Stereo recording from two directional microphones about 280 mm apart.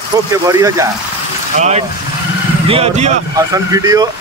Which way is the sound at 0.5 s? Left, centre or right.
Centre.